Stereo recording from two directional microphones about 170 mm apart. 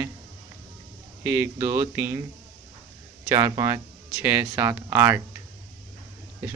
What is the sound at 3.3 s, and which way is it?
Speech, 20° right (ahead or behind).